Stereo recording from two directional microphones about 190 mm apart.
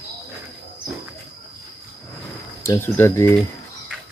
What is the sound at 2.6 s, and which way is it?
Speech, 15° left (ahead or behind).